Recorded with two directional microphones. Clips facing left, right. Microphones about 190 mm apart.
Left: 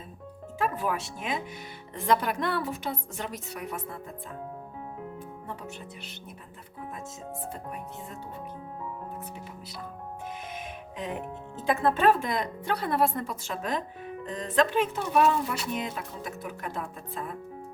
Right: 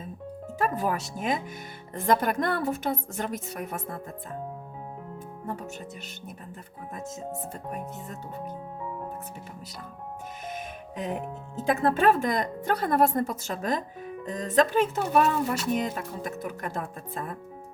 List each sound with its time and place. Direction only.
0.6 s a woman's voice: 40° right (ahead or behind)
10.5 s music: 45° right (ahead or behind)
11.6 s a woman's voice: 45° right (ahead or behind)